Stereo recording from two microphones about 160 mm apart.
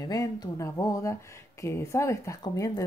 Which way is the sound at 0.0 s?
25° left (ahead or behind).